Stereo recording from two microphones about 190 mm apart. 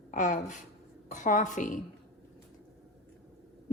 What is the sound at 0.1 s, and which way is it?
A woman's voice, 40° left (ahead or behind).